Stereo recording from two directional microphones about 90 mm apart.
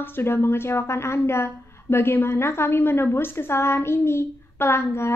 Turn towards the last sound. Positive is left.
turn(degrees=30)  # may be behind; listen again after turning